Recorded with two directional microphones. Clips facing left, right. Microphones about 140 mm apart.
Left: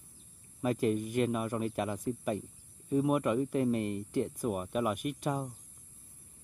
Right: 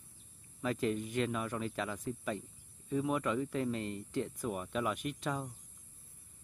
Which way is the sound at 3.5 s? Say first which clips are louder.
Left 6 dB; 50° left (ahead or behind).